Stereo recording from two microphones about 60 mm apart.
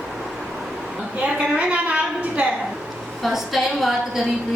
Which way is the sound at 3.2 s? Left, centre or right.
Centre.